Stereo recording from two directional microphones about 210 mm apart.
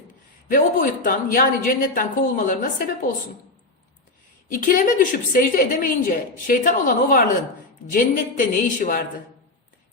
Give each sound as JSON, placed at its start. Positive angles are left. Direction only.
{"t": 0.4, "sound": "a woman's voice", "side_deg": 40}
{"t": 4.5, "sound": "a woman's voice", "side_deg": 40}